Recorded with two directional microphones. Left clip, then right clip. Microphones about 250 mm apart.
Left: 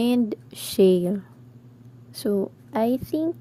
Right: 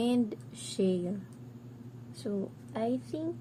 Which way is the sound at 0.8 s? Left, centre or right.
Left.